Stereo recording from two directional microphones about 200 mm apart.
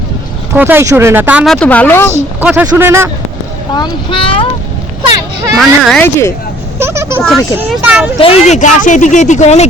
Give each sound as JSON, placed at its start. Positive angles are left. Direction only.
{"t": 0.5, "sound": "speech", "side_deg": -10}
{"t": 1.5, "sound": "a woman's voice", "side_deg": 5}
{"t": 2.1, "sound": "speech", "side_deg": -5}
{"t": 3.8, "sound": "speech", "side_deg": 25}
{"t": 5.5, "sound": "speech", "side_deg": 0}
{"t": 6.7, "sound": "a sound", "side_deg": -15}
{"t": 7.2, "sound": "speech", "side_deg": 0}
{"t": 8.2, "sound": "speech", "side_deg": 35}